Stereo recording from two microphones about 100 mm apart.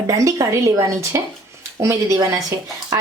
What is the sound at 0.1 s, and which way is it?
A woman's voice, 35° right (ahead or behind).